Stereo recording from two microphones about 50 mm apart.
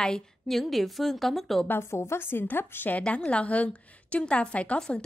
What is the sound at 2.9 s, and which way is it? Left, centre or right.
A woman's voice, left.